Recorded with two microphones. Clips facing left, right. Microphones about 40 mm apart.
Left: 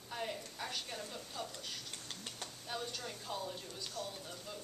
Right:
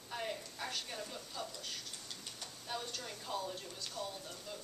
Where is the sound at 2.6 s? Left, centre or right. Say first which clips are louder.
Even; centre.